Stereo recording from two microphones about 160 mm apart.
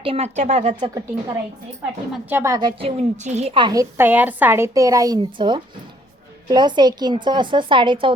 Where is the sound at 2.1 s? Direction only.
10° right (ahead or behind).